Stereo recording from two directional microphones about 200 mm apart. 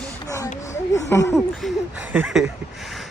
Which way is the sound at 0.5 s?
35° left (ahead or behind).